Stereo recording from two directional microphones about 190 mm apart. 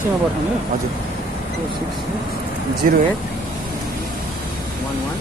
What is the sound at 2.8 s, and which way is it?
Speech, 45° right (ahead or behind).